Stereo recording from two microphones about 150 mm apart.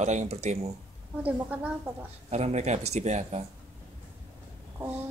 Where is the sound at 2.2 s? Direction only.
45° right (ahead or behind).